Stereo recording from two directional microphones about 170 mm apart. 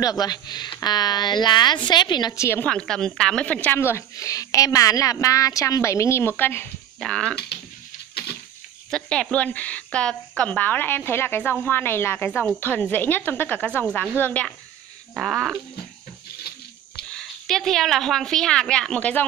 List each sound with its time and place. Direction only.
0.0 s speech: 25° left (ahead or behind); by 7.3 s 5° left (ahead or behind)
8.9 s a woman's voice: 5° left (ahead or behind)
15.1 s a woman's voice: centre (ahead or behind)
17.1 s a woman's voice: 5° left (ahead or behind)